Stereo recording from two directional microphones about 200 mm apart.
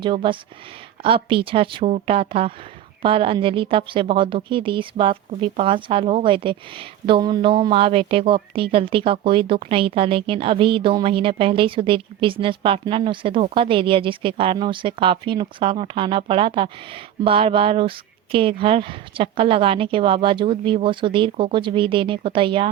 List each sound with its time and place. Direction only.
0.0 s speech: 25° right (ahead or behind)